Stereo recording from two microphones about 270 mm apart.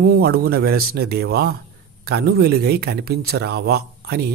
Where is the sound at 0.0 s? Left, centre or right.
Right.